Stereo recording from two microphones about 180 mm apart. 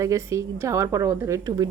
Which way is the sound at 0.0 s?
15° right (ahead or behind).